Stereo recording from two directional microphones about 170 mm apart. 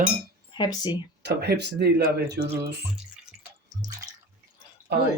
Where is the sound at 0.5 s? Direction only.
25° left (ahead or behind).